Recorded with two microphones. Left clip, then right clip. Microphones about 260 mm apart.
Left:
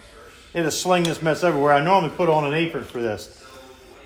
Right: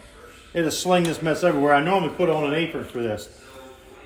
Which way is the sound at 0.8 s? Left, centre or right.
Centre.